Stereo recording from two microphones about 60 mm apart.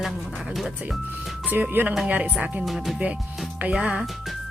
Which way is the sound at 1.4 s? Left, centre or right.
Right.